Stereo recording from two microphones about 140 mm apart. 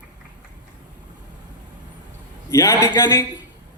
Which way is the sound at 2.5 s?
20° left (ahead or behind).